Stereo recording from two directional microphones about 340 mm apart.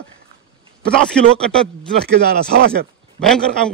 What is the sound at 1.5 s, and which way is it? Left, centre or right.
Speech, right.